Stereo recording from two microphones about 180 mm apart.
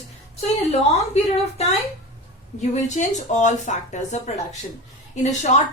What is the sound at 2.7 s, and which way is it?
Speech, 40° left (ahead or behind).